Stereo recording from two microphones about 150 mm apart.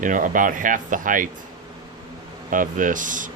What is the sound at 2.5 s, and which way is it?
Speech, 60° right (ahead or behind).